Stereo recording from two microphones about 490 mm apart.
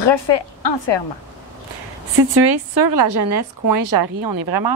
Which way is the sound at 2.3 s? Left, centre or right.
Right.